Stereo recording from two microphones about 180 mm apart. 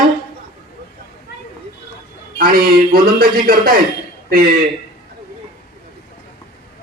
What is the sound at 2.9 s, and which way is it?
Speech, 55° right (ahead or behind).